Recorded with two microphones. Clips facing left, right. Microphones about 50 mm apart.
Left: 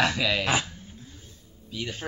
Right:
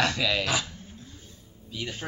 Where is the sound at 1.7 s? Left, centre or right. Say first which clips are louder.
Left 1 dB; centre.